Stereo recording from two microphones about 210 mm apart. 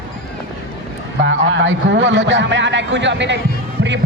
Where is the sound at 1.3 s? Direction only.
65° right (ahead or behind).